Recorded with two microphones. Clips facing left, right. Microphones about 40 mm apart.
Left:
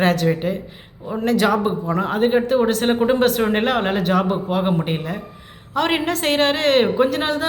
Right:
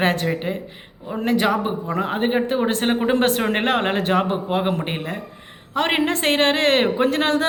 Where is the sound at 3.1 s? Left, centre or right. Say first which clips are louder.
Left 2 dB; right.